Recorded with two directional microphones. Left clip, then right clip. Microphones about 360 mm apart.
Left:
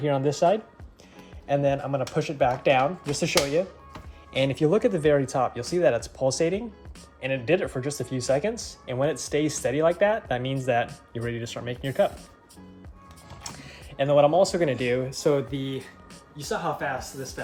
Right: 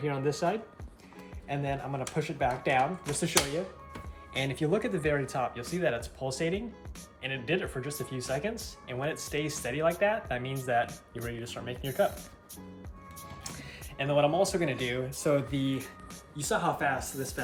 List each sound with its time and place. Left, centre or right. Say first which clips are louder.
0.0 s speech: left 8 dB; centre
4.5 s speech: left 7 dB; left
13.6 s music: left 9 dB; left
14.6 s speech: left 7 dB; left
14.8 s speech: left 6 dB; centre
16.4 s speech: left 1 dB; centre